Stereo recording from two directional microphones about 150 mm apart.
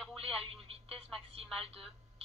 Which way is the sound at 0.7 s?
40° right (ahead or behind).